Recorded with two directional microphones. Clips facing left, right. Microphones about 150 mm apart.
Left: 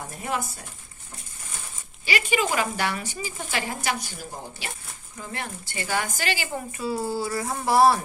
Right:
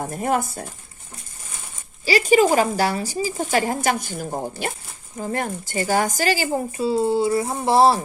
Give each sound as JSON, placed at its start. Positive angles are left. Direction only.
{"t": 0.0, "sound": "speech", "side_deg": -45}
{"t": 2.0, "sound": "speech", "side_deg": -40}